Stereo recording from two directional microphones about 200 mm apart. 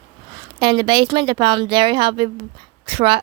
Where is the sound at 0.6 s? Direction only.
25° right (ahead or behind).